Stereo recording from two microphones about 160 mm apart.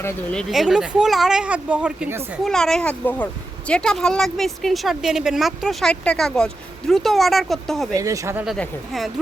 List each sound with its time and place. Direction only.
0.0 s a woman's voice: 5° left (ahead or behind); by 2.4 s 10° right (ahead or behind)
2.4 s a woman's voice: 5° left (ahead or behind)
7.9 s speech: 20° right (ahead or behind)
8.4 s a woman's voice: centre (ahead or behind)